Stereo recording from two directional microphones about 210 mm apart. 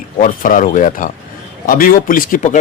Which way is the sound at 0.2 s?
40° left (ahead or behind).